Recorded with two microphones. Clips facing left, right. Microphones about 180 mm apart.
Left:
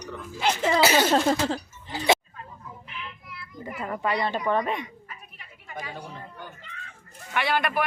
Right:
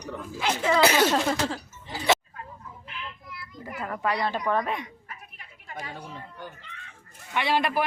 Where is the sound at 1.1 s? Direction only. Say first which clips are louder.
Left 3 dB; 35° left (ahead or behind).